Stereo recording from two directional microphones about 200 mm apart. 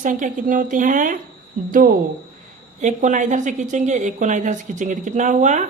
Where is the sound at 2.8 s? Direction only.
40° right (ahead or behind).